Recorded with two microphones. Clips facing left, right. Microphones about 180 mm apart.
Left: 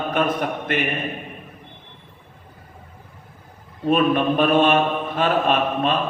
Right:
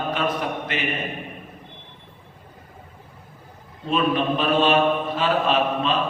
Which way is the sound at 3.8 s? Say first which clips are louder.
Left 4 dB; 50° left (ahead or behind).